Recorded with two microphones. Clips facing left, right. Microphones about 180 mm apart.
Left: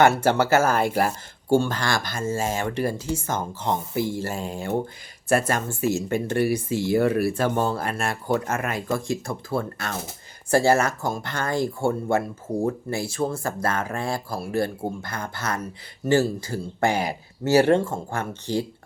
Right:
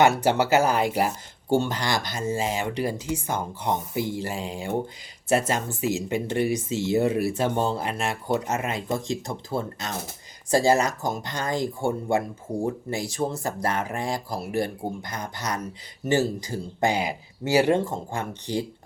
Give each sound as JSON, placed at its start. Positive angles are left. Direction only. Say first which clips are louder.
{"t": 0.2, "sound": "speech", "louder": "left 1 dB", "side_deg": -15}